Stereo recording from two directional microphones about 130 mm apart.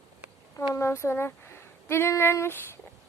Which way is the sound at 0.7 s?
20° left (ahead or behind).